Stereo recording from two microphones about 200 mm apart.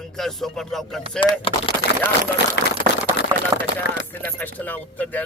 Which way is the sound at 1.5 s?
25° left (ahead or behind).